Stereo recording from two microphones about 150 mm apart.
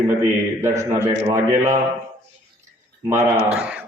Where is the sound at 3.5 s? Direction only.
5° right (ahead or behind).